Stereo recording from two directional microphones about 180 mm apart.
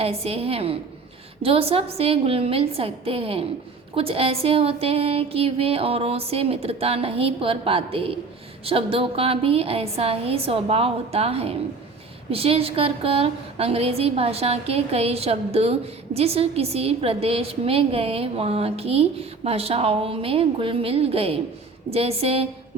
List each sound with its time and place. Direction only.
0.0 s a woman's voice: 35° right (ahead or behind)